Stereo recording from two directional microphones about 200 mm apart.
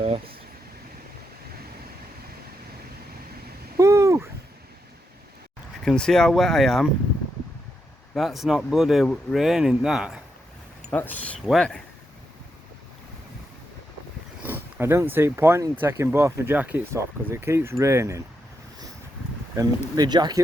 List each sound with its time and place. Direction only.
3.8 s a sound: 15° right (ahead or behind)
5.8 s speech: centre (ahead or behind)
8.1 s speech: centre (ahead or behind)
10.9 s speech: 10° left (ahead or behind)
14.4 s speech: 10° right (ahead or behind)
19.5 s speech: 20° right (ahead or behind)